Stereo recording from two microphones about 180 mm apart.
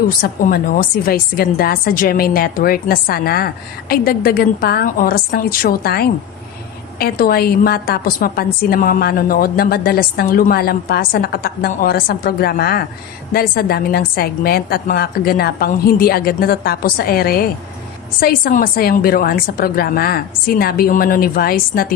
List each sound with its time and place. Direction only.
0.2 s a woman's voice: 50° left (ahead or behind)